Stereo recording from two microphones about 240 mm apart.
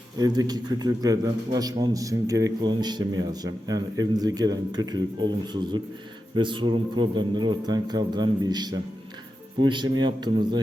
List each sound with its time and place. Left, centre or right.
0.2 s a man's voice: centre